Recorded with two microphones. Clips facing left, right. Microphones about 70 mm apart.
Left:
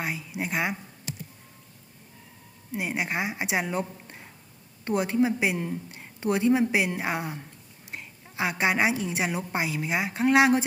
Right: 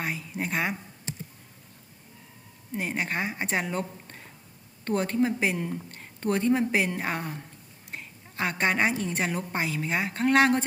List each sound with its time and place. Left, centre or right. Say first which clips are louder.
0.0 s a woman's voice: even; centre
1.1 s music: even; right
2.7 s a woman's voice: left 1 dB; centre